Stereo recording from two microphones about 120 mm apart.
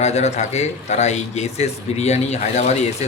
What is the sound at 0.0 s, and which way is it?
Speech, 70° left (ahead or behind).